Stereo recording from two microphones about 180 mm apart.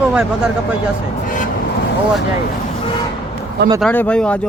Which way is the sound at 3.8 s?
5° left (ahead or behind).